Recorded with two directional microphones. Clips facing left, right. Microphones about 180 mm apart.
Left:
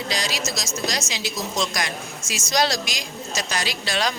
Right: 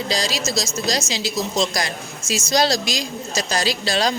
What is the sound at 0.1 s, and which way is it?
Speech, 35° right (ahead or behind).